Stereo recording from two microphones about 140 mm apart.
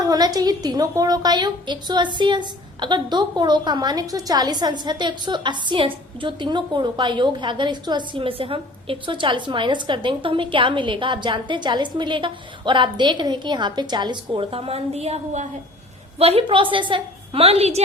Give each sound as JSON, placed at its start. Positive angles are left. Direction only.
{"t": 0.0, "sound": "a woman's voice", "side_deg": -25}